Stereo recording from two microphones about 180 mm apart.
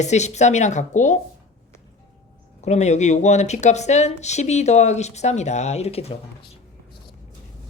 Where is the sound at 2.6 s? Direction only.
40° left (ahead or behind).